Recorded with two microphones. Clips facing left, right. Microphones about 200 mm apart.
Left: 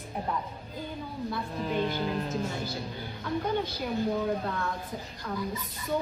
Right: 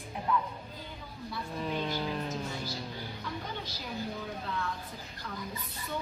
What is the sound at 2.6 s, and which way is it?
A woman's voice, 60° left (ahead or behind).